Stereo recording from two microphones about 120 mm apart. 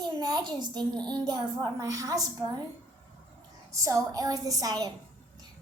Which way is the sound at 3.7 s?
30° right (ahead or behind).